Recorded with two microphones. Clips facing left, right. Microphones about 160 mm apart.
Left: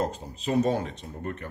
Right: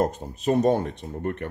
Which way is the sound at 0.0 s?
55° right (ahead or behind).